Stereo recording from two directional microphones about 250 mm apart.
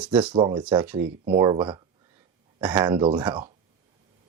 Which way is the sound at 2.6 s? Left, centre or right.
Centre.